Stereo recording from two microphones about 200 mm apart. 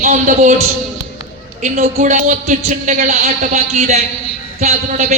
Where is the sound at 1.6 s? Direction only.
40° right (ahead or behind).